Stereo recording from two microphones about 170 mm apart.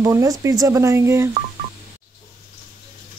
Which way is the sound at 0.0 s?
15° right (ahead or behind).